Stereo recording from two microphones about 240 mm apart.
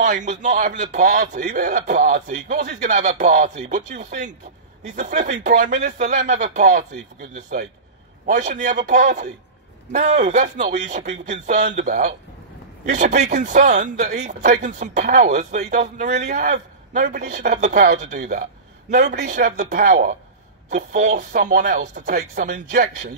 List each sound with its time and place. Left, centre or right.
0.0 s speech: right
18.9 s speech: right